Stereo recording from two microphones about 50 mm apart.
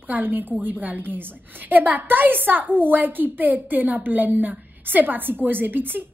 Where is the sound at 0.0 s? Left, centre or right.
Right.